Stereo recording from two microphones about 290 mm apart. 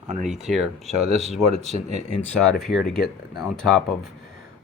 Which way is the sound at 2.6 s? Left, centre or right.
Centre.